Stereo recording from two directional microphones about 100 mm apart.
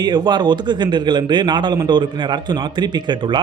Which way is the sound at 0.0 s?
45° right (ahead or behind).